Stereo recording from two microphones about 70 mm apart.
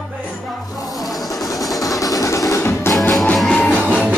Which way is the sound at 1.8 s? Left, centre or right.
Left.